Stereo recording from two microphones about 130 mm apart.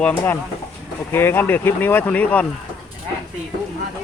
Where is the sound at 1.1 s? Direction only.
15° left (ahead or behind).